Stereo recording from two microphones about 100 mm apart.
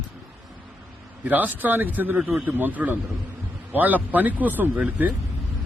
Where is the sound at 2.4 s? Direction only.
15° right (ahead or behind).